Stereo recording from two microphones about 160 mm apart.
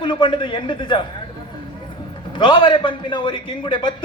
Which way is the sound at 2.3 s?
30° left (ahead or behind).